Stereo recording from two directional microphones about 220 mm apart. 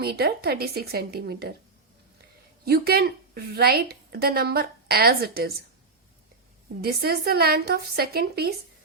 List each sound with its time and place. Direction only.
0.0 s a woman's voice: 45° right (ahead or behind)
2.6 s a woman's voice: 45° right (ahead or behind)
6.8 s a woman's voice: 45° right (ahead or behind)